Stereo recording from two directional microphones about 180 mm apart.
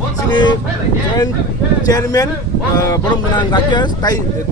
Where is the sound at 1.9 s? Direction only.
20° left (ahead or behind).